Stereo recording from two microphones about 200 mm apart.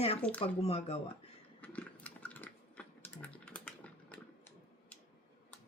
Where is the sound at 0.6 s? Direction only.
30° left (ahead or behind).